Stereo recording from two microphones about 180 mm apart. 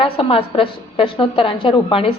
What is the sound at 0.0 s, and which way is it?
A woman's voice, 30° left (ahead or behind).